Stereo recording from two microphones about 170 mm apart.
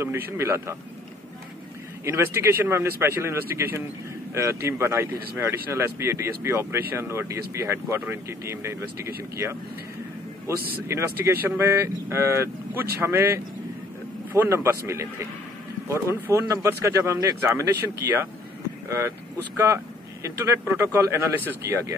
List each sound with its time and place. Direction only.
0.0 s speech: 15° right (ahead or behind)
2.0 s speech: 15° right (ahead or behind)
19.5 s speech: 15° right (ahead or behind)